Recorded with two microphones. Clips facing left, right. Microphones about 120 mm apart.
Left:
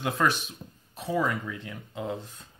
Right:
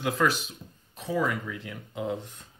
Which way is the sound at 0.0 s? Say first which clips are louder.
Even; centre (ahead or behind).